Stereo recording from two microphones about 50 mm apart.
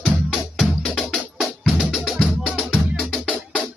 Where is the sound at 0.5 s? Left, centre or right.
Centre.